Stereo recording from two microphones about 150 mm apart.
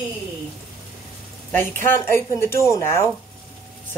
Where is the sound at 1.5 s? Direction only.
15° left (ahead or behind).